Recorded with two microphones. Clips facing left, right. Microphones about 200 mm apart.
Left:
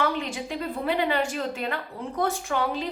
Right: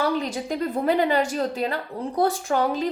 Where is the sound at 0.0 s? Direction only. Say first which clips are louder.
Right 3 dB; 40° right (ahead or behind).